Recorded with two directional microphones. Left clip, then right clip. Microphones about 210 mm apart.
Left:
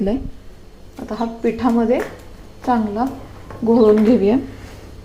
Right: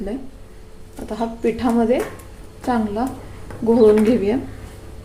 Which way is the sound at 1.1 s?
5° left (ahead or behind).